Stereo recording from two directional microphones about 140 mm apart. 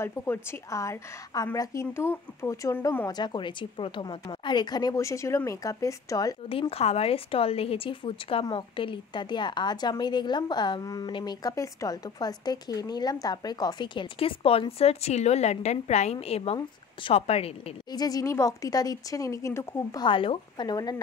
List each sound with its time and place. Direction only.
0.0 s a woman's voice: 15° left (ahead or behind)
3.1 s a woman's voice: 30° left (ahead or behind)
6.7 s a woman's voice: 45° left (ahead or behind)
17.9 s a woman's voice: 25° left (ahead or behind)
20.1 s a woman's voice: 40° left (ahead or behind)